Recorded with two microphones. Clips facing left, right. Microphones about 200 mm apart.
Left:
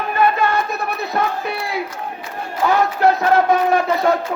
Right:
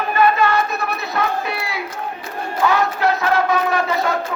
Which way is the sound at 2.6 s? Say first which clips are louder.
Left 3 dB; 55° left (ahead or behind).